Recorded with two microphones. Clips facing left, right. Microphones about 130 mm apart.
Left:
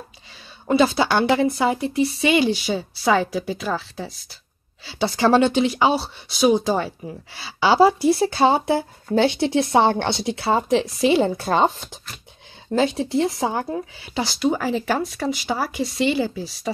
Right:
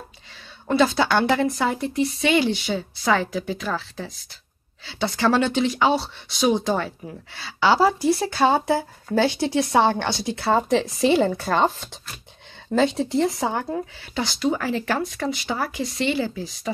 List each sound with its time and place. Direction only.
0.7 s a woman's voice: 10° left (ahead or behind)
5.2 s a woman's voice: 20° left (ahead or behind)
11.1 s speech: 25° left (ahead or behind)
12.7 s a woman's voice: 5° left (ahead or behind)
16.7 s speech: 20° left (ahead or behind)